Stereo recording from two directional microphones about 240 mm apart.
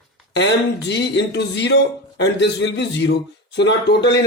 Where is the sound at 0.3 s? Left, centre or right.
Left.